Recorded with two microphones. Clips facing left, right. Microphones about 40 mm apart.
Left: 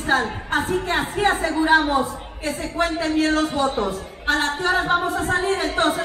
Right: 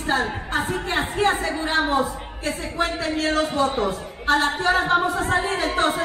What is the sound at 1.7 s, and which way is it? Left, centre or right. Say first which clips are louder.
Speech: left 1 dB; centre.